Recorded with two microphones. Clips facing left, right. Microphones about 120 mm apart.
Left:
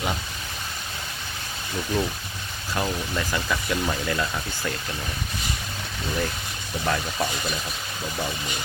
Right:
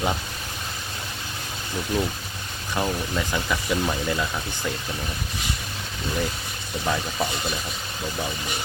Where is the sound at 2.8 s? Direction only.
15° right (ahead or behind).